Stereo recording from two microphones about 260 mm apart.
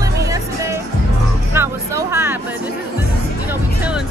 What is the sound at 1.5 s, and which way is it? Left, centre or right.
Music, centre.